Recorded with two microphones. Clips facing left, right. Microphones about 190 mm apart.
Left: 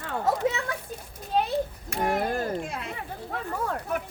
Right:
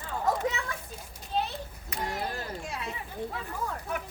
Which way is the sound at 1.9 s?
50° left (ahead or behind).